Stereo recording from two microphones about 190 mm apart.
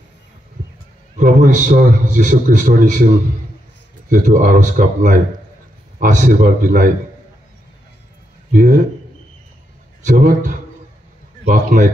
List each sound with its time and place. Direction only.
1.1 s a man's voice: 40° right (ahead or behind)
4.1 s a man's voice: 40° right (ahead or behind)
8.5 s a man's voice: 40° right (ahead or behind)
10.0 s a man's voice: 45° right (ahead or behind)